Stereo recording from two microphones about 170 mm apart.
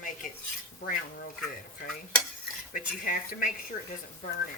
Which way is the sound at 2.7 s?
50° left (ahead or behind).